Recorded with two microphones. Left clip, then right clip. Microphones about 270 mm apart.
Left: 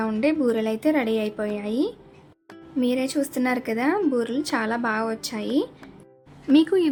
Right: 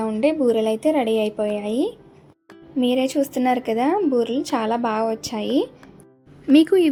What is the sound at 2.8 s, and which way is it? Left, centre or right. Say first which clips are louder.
A woman's voice: right 4 dB; centre.